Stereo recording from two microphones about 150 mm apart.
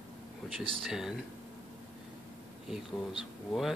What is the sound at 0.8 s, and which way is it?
Speech, 5° right (ahead or behind).